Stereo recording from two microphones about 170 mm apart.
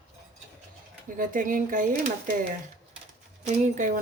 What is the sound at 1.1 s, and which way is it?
Speech, 50° right (ahead or behind).